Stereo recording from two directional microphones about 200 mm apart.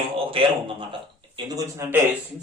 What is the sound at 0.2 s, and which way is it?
A man's voice, 25° right (ahead or behind).